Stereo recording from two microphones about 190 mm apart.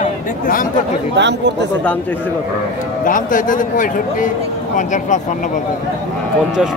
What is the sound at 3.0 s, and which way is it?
A man's voice, 45° left (ahead or behind).